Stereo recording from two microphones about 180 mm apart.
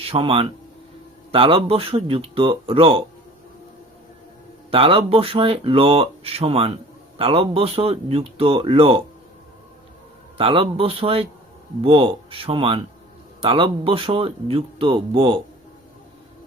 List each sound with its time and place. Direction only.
0.0 s speech: 30° right (ahead or behind)
4.7 s speech: 30° right (ahead or behind)
10.3 s speech: 30° right (ahead or behind)